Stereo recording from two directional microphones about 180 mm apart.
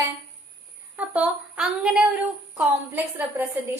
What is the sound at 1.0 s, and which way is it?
A woman's voice, 5° right (ahead or behind).